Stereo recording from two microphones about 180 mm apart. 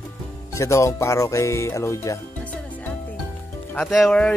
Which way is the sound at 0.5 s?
15° left (ahead or behind).